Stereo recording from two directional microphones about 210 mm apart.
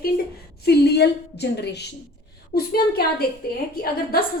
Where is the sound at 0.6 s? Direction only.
50° left (ahead or behind).